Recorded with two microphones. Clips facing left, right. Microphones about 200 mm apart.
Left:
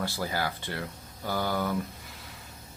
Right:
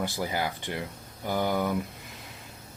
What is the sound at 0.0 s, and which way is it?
Speech, 20° right (ahead or behind).